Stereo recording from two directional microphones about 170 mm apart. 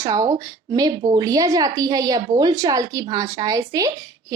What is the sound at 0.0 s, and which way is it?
A woman's voice, 20° right (ahead or behind).